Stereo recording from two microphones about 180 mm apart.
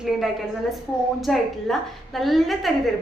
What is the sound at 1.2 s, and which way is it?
A woman's voice, centre (ahead or behind).